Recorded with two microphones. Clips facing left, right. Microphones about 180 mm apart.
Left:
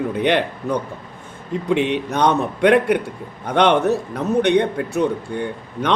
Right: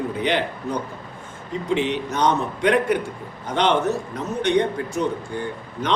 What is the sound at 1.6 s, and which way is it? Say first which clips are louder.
A man's voice: left 3 dB; 65° left (ahead or behind).